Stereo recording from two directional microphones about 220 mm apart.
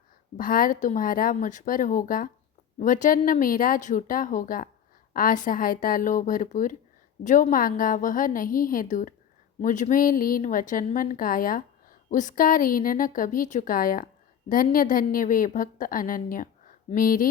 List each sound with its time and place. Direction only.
0.3 s a woman's voice: 40° left (ahead or behind)